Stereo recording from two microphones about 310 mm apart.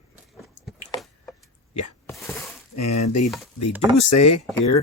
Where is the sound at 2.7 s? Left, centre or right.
Left.